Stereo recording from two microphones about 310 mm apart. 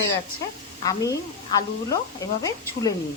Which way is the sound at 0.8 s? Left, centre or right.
Centre.